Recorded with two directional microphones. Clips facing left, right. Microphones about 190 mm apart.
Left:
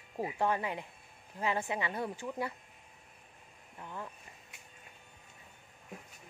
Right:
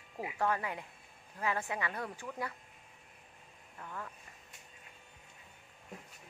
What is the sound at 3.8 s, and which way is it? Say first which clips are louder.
Speech: left 1 dB; 20° left (ahead or behind).